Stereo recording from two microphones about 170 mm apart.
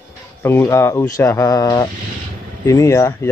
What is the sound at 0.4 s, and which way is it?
Speech, 15° left (ahead or behind).